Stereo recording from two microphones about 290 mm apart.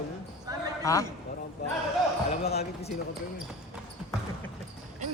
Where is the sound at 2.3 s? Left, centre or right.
Left.